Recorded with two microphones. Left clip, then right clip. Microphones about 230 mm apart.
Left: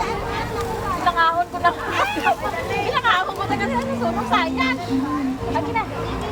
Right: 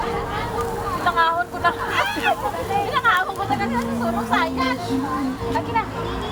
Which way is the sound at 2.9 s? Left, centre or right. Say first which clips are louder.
Even; centre.